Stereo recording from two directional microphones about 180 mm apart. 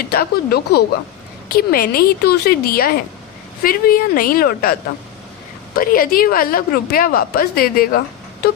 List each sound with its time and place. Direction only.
0.0 s a woman's voice: 55° left (ahead or behind)